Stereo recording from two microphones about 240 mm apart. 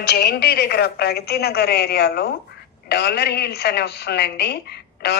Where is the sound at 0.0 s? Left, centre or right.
Left.